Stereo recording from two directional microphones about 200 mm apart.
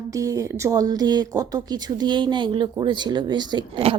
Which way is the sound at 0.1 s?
15° right (ahead or behind).